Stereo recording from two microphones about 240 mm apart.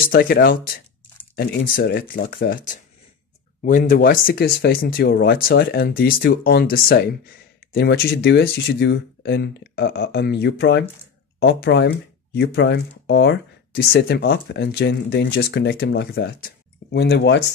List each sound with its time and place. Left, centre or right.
0.0 s speech: left